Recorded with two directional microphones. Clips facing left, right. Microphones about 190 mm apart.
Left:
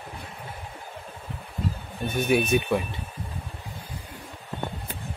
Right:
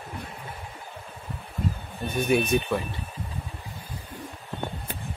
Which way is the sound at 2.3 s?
5° left (ahead or behind).